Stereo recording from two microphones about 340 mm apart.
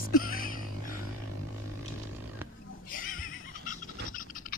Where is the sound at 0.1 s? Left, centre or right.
Left.